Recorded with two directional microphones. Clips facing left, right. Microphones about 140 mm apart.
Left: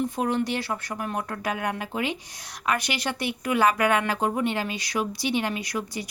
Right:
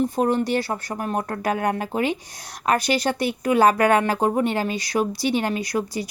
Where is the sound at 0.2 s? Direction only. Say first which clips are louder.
Right 5 dB; 40° right (ahead or behind).